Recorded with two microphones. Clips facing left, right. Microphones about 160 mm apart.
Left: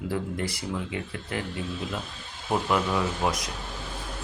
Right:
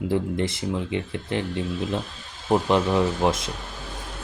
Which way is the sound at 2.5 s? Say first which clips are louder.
Right 5 dB; 25° right (ahead or behind).